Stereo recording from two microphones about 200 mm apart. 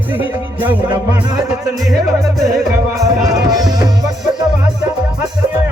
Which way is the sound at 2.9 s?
15° right (ahead or behind).